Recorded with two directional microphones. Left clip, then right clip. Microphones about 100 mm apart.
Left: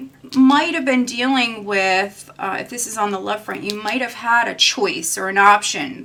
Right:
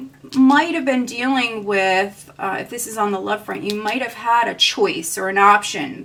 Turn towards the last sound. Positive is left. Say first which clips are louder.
# left 1 dB
turn(degrees=15)  # may be behind; listen again after turning